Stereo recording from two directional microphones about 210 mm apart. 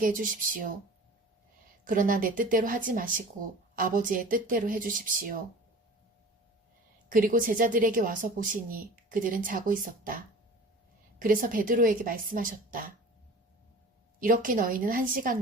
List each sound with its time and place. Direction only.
0.0 s a woman's voice: 40° right (ahead or behind)
1.8 s a woman's voice: 40° right (ahead or behind)
7.1 s a woman's voice: 40° right (ahead or behind)
11.2 s a woman's voice: 40° right (ahead or behind)
14.2 s a woman's voice: 40° right (ahead or behind)